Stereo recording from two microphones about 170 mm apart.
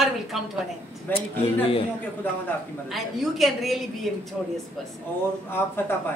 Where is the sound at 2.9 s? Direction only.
Centre (ahead or behind).